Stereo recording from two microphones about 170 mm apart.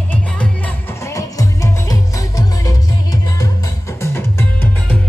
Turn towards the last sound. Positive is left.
turn(degrees=10)  # may be behind; listen again after turning